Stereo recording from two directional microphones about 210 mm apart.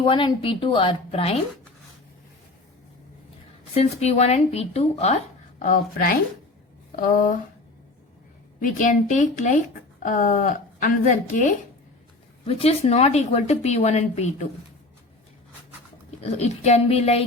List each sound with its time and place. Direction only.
0.0 s a woman's voice: 25° left (ahead or behind)
3.8 s speech: 30° left (ahead or behind)
8.6 s speech: 40° left (ahead or behind)
16.4 s speech: 30° left (ahead or behind)